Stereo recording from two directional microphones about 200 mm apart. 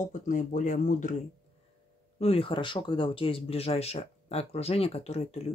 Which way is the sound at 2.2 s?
25° left (ahead or behind).